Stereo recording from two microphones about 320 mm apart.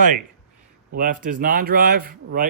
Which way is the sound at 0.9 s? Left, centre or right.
Right.